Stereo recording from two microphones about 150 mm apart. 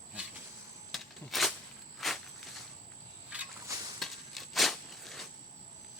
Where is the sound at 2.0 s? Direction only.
Centre (ahead or behind).